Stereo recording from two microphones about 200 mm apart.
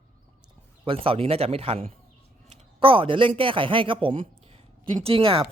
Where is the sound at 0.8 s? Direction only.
25° right (ahead or behind).